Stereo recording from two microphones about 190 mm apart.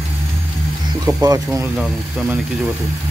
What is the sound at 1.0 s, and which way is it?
Speech, 20° right (ahead or behind).